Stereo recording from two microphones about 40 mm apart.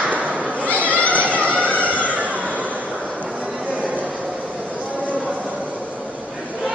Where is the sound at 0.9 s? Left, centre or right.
Left.